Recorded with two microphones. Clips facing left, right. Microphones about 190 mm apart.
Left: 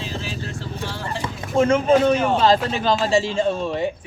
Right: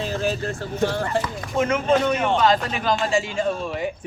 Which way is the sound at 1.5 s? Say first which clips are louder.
Left 4 dB; 30° left (ahead or behind).